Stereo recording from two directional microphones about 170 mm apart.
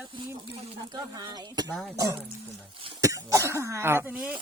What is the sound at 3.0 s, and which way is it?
Speech, 20° right (ahead or behind).